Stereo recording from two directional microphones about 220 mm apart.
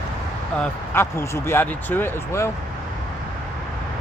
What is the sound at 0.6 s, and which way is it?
Speech, 10° left (ahead or behind).